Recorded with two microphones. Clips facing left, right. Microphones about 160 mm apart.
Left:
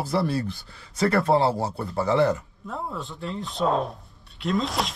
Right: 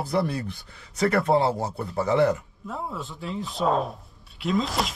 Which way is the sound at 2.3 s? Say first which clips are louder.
Even; centre (ahead or behind).